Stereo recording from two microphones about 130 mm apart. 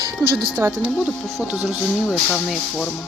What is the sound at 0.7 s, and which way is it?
Speech, 10° right (ahead or behind).